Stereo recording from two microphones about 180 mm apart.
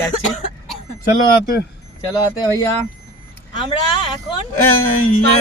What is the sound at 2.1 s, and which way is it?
Speech, 20° left (ahead or behind).